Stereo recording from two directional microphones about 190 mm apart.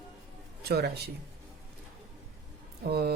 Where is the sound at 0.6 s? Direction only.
60° right (ahead or behind).